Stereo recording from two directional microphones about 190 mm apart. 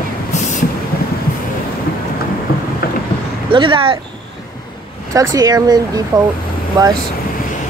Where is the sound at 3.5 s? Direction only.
25° right (ahead or behind).